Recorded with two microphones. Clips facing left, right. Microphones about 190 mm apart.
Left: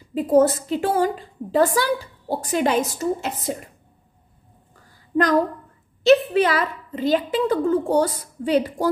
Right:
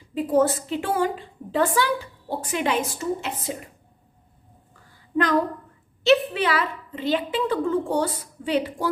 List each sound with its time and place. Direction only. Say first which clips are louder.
0.1 s a woman's voice: left 4 dB; 45° left (ahead or behind)
5.1 s a woman's voice: left 3 dB; 40° left (ahead or behind)